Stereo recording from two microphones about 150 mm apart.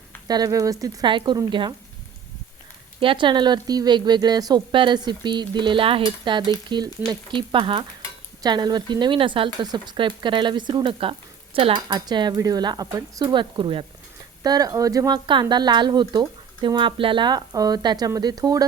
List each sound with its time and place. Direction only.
0.3 s speech: 25° right (ahead or behind)
3.0 s speech: 35° right (ahead or behind)